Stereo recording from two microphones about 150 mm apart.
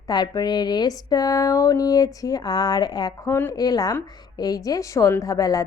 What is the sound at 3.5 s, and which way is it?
A woman's voice, 25° left (ahead or behind).